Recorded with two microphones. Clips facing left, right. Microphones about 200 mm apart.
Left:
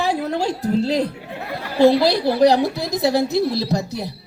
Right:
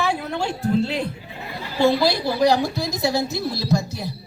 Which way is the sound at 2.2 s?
65° left (ahead or behind).